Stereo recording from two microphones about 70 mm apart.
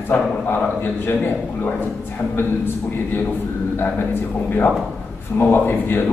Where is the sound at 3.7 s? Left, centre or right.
Left.